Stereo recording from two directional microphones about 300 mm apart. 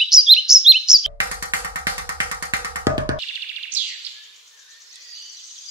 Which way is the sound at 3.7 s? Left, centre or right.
Centre.